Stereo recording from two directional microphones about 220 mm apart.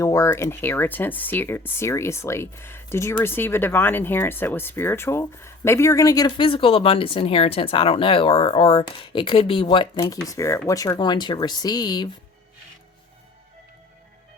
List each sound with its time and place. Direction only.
0.0 s speech: 15° left (ahead or behind)